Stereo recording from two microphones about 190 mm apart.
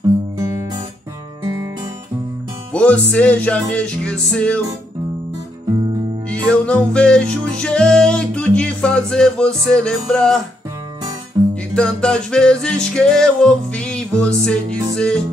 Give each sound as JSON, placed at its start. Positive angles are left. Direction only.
{"t": 2.7, "sound": "music", "side_deg": 5}
{"t": 6.2, "sound": "music", "side_deg": 5}
{"t": 11.4, "sound": "music", "side_deg": -20}
{"t": 11.7, "sound": "music", "side_deg": 5}